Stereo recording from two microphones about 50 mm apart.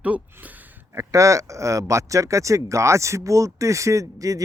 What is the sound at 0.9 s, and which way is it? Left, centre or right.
Speech, right.